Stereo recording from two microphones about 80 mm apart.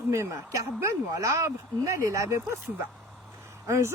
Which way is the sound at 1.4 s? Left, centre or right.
Right.